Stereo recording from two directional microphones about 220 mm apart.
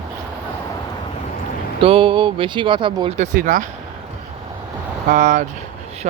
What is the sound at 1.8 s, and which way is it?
Speech, 25° right (ahead or behind).